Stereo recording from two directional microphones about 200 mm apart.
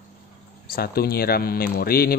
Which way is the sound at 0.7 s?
50° left (ahead or behind).